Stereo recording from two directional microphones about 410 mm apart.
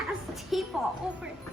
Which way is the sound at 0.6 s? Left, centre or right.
Centre.